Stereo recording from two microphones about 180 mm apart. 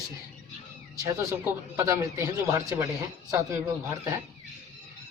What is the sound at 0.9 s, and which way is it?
Speech, 15° right (ahead or behind).